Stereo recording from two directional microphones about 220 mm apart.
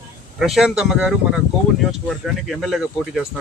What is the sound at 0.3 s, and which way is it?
Speech, centre (ahead or behind).